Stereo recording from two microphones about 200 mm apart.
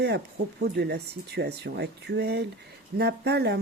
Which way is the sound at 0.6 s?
55° right (ahead or behind).